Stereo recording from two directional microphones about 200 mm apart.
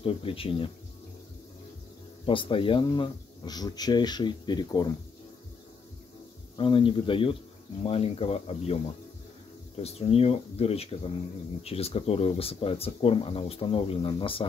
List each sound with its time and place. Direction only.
0.0 s speech: 25° left (ahead or behind)
2.2 s speech: 25° left (ahead or behind)
6.5 s speech: 25° left (ahead or behind)
9.8 s speech: 30° left (ahead or behind)